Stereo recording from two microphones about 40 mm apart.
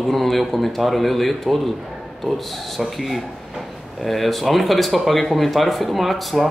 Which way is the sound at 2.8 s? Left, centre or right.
Centre.